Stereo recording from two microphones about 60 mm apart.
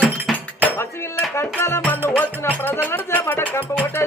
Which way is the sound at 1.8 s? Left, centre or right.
Left.